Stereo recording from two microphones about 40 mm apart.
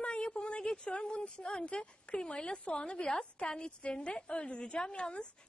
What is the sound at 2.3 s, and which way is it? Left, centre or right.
A woman's voice, left.